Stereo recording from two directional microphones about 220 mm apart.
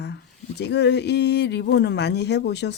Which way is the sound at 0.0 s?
50° left (ahead or behind).